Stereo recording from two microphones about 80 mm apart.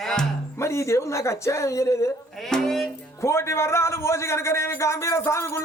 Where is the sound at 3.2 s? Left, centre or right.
Left.